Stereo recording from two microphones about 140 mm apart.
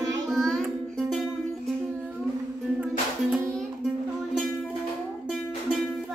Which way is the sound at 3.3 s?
5° left (ahead or behind).